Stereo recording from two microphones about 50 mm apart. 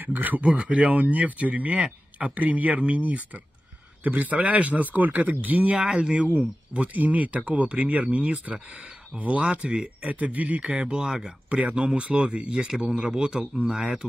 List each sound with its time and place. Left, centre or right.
0.0 s speech: right
5.8 s speech: centre
11.5 s speech: right